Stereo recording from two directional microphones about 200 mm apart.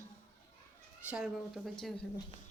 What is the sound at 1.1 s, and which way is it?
Speech, 5° right (ahead or behind).